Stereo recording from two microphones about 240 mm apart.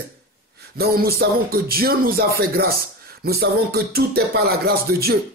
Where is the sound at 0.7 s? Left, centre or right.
Right.